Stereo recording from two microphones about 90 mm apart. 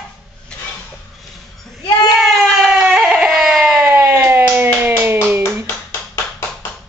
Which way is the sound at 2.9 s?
10° right (ahead or behind).